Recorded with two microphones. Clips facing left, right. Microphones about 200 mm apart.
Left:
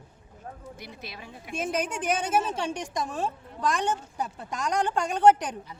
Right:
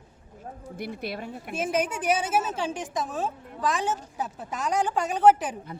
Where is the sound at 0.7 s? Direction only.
55° right (ahead or behind).